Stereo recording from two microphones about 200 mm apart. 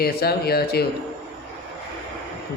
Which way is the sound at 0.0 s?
50° left (ahead or behind).